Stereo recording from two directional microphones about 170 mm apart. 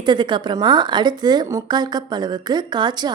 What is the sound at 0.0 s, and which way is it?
A woman's voice, 25° right (ahead or behind).